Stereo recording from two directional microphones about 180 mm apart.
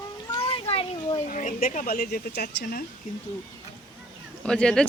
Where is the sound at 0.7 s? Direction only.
30° left (ahead or behind).